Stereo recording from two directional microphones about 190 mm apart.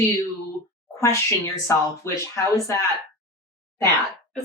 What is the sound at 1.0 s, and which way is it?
Speech, 15° left (ahead or behind).